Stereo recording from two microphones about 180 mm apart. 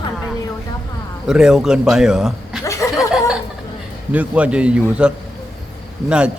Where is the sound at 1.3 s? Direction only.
5° right (ahead or behind).